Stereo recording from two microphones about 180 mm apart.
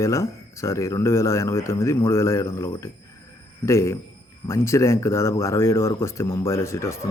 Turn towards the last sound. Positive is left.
turn(degrees=15)  # may be behind; listen again after turning